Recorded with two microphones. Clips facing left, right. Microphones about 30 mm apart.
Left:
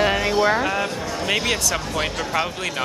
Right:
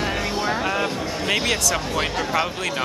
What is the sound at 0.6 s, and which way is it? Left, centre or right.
Speech, centre.